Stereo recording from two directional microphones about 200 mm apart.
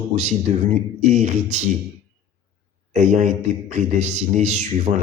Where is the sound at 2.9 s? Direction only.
35° right (ahead or behind).